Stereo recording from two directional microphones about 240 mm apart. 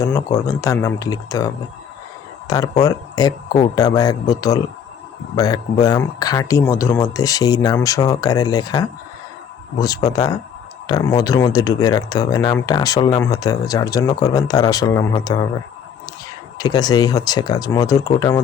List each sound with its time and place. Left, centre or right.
0.0 s speech: centre
16.6 s speech: centre